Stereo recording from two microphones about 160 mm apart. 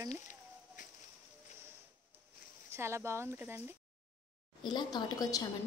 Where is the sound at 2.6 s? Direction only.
15° right (ahead or behind).